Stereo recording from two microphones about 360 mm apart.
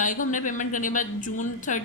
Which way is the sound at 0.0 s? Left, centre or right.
Left.